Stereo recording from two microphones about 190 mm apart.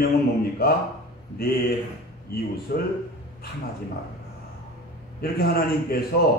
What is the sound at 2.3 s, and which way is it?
Speech, 55° left (ahead or behind).